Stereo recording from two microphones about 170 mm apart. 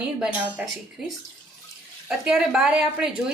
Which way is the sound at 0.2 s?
5° right (ahead or behind).